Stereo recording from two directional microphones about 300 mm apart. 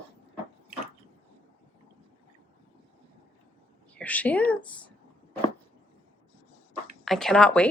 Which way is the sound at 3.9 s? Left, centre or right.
Centre.